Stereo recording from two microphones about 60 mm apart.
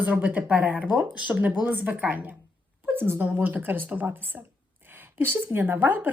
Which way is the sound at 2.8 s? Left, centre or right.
Right.